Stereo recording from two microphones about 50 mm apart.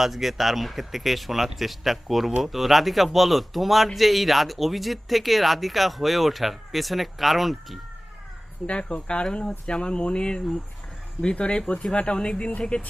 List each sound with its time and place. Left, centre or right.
0.0 s speech: centre
8.6 s speech: left